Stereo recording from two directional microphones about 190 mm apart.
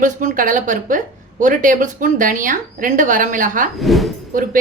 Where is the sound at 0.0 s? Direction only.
45° right (ahead or behind).